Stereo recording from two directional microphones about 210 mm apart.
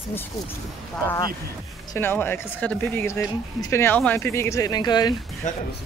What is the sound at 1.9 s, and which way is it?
Speech, 10° left (ahead or behind).